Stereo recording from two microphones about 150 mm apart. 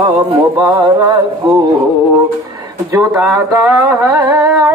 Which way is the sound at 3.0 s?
20° right (ahead or behind).